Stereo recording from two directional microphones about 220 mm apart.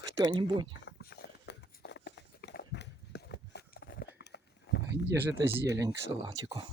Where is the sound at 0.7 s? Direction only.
50° left (ahead or behind).